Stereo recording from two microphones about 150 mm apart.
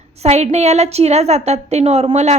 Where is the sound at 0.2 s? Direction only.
45° right (ahead or behind).